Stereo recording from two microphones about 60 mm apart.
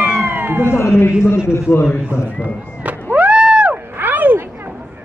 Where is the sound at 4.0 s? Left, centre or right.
Right.